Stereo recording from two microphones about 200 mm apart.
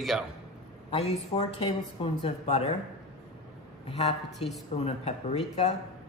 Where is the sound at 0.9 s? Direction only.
30° left (ahead or behind).